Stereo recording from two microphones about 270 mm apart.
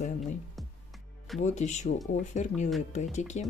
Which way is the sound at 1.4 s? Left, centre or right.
Left.